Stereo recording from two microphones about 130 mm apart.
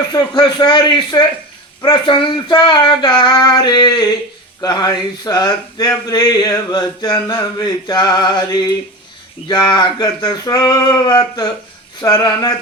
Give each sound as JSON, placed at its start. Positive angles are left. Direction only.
{"t": 0.1, "sound": "female singing", "side_deg": 35}
{"t": 4.6, "sound": "a sound", "side_deg": 30}
{"t": 9.5, "sound": "female singing", "side_deg": 30}